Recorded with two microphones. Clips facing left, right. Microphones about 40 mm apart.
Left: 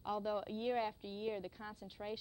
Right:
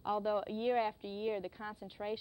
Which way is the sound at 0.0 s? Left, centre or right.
Centre.